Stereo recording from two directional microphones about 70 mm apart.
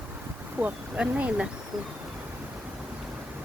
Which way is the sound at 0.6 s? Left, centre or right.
Right.